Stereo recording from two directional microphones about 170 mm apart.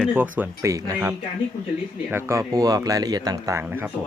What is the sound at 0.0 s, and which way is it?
Speech, 10° right (ahead or behind).